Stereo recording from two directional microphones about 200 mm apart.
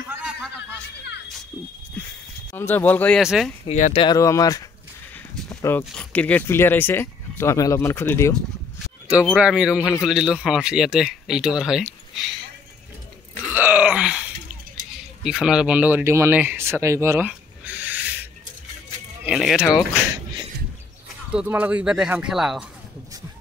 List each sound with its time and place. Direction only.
0.1 s a sound: 5° right (ahead or behind)
2.5 s speech: 10° left (ahead or behind)
3.2 s speech: centre (ahead or behind)
3.6 s speech: 35° left (ahead or behind)
4.0 s speech: 15° left (ahead or behind)
9.2 s speech: 5° right (ahead or behind)
13.5 s groan: 10° right (ahead or behind)
15.0 s speech: 5° right (ahead or behind)
17.3 s a sound: 10° right (ahead or behind)
19.2 s speech: centre (ahead or behind)
21.3 s speech: 5° right (ahead or behind)